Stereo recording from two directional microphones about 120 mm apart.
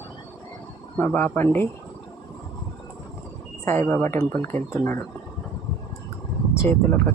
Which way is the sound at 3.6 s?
20° left (ahead or behind).